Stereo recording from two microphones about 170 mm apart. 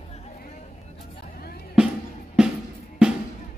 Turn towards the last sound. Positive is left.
turn(degrees=-5)  # may be behind; listen again after turning